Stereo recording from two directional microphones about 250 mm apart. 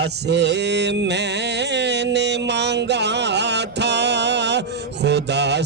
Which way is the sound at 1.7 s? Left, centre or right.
Right.